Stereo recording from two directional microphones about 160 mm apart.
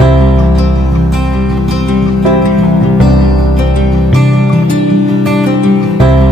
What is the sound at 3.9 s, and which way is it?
Music, centre (ahead or behind).